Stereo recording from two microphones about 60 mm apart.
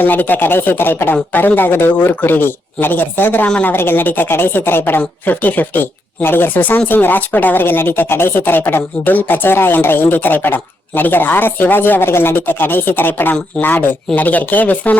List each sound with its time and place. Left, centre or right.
0.0 s speech: left